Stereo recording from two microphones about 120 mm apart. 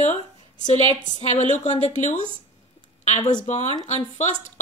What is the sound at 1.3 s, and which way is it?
Speech, 85° left.